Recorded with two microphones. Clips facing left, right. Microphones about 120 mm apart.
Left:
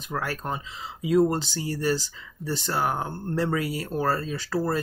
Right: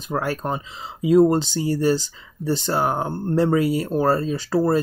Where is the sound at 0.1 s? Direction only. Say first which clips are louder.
Right 6 dB; 25° right (ahead or behind).